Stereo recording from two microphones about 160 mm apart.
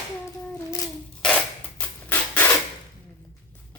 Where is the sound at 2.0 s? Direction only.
10° left (ahead or behind).